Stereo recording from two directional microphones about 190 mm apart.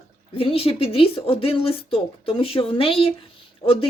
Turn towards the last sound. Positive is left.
turn(degrees=30)  # may be behind; listen again after turning